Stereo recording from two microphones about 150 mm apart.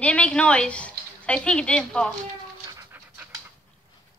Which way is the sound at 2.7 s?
15° right (ahead or behind).